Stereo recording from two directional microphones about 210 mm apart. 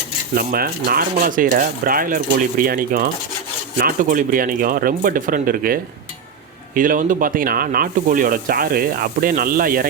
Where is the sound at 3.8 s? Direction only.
40° right (ahead or behind).